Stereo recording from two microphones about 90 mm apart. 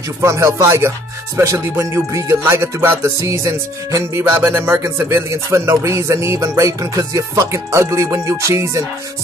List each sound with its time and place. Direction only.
0.2 s music: 35° right (ahead or behind)